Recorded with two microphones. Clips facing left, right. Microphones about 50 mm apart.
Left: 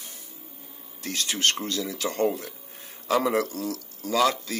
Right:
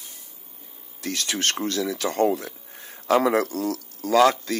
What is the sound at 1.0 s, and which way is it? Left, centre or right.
Speech, right.